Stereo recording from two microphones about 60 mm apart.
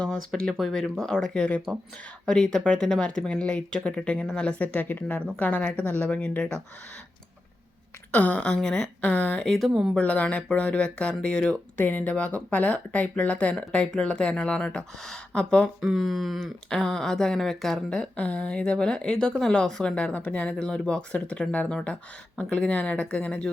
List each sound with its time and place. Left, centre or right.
0.5 s speech: centre
1.7 s speech: centre
2.2 s speech: centre
8.1 s speech: left
8.4 s speech: centre
9.4 s speech: centre
9.9 s speech: left
11.9 s speech: left
15.8 s speech: centre
16.6 s speech: centre
17.9 s speech: centre